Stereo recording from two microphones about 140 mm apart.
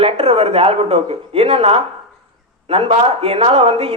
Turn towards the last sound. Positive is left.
turn(degrees=-45)  # may be behind; listen again after turning